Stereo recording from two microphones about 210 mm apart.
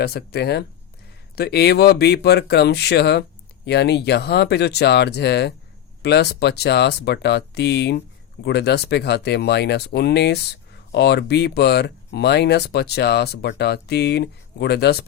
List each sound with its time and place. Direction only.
0.0 s speech: 50° left (ahead or behind)